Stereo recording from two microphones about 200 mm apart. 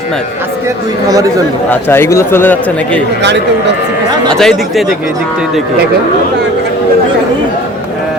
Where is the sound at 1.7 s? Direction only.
10° left (ahead or behind).